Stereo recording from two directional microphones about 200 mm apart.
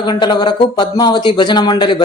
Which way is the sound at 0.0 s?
20° left (ahead or behind).